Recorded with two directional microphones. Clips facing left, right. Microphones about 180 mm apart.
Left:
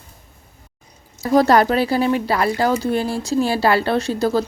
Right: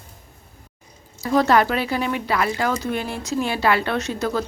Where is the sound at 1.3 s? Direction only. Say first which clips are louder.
Left 4 dB; 35° left (ahead or behind).